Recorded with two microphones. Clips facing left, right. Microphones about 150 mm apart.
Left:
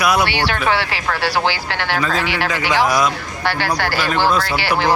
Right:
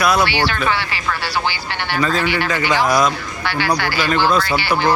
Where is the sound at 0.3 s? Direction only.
70° left (ahead or behind); by 2.5 s 90° left.